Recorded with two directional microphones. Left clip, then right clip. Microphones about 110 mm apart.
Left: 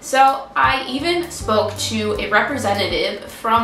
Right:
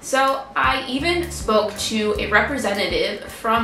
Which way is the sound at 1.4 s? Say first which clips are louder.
Even; 15° left (ahead or behind).